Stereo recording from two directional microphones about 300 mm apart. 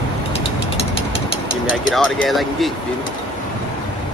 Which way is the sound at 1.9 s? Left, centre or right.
Centre.